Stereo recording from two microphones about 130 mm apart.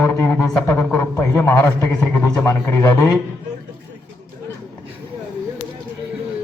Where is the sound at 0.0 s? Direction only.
10° left (ahead or behind).